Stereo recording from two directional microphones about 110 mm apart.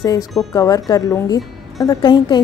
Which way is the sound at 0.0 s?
35° left (ahead or behind).